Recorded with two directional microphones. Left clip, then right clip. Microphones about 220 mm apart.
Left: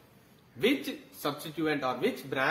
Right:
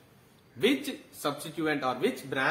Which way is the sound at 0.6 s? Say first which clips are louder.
Right 1 dB; 20° right (ahead or behind).